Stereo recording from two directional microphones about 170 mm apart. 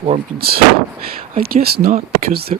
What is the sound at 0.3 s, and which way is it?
Speech, 65° right (ahead or behind).